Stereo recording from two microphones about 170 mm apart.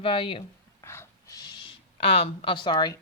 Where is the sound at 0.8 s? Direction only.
15° left (ahead or behind).